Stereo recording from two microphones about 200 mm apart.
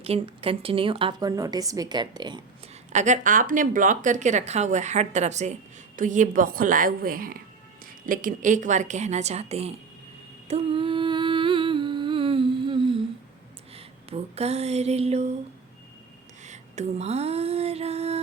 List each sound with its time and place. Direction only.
0.0 s a woman's voice: 30° right (ahead or behind)
2.9 s a woman's voice: 35° right (ahead or behind)
10.5 s humming: 25° right (ahead or behind)
13.7 s a sound: 30° right (ahead or behind)
16.4 s music: 35° right (ahead or behind)